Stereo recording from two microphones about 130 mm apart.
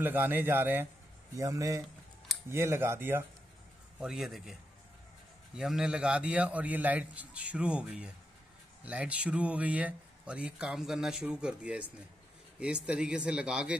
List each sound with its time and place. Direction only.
0.0 s a man's voice: 15° right (ahead or behind)
4.0 s a man's voice: centre (ahead or behind)
5.6 s a man's voice: 5° right (ahead or behind)